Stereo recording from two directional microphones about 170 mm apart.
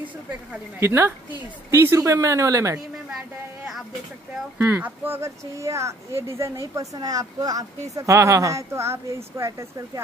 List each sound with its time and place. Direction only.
0.5 s speech: 15° right (ahead or behind)
4.6 s speech: 10° right (ahead or behind)